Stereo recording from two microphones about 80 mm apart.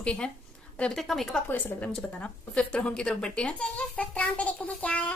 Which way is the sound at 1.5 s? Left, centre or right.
Left.